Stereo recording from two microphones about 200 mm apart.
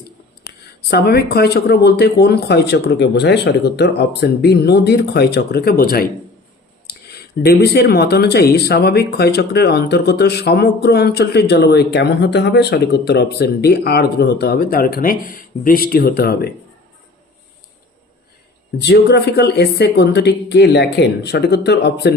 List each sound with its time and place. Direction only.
0.8 s speech: 55° left (ahead or behind)
18.8 s speech: 55° left (ahead or behind)